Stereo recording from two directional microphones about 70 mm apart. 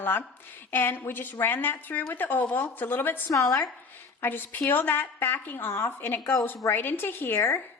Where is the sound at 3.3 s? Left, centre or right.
Left.